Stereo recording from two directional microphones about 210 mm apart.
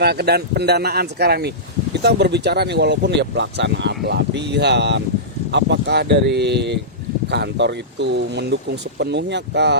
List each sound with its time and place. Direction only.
0.0 s speech: 50° right (ahead or behind)